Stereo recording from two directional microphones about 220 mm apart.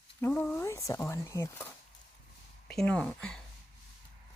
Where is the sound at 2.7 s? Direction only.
5° left (ahead or behind).